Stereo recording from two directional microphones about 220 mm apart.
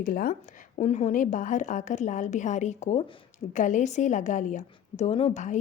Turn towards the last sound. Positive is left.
turn(degrees=35)  # may be behind; listen again after turning